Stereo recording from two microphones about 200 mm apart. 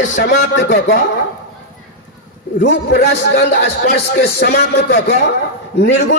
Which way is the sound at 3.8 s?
50° left (ahead or behind).